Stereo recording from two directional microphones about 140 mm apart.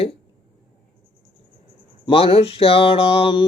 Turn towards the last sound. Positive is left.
turn(degrees=40)  # may be behind; listen again after turning